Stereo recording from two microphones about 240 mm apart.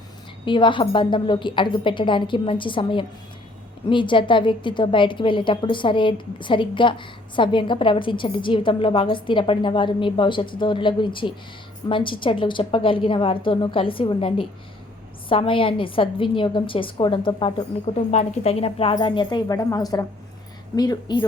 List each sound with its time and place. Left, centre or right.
0.4 s a woman's voice: centre